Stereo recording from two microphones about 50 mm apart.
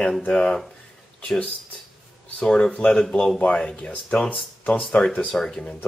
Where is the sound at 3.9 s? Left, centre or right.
Left.